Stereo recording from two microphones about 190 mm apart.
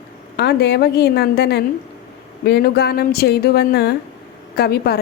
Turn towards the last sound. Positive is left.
turn(degrees=55)  # may be behind; listen again after turning